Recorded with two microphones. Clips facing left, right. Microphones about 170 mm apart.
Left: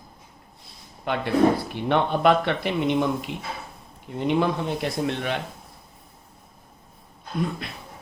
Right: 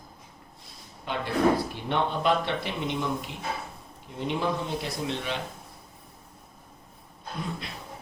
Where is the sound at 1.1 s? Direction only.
60° left (ahead or behind).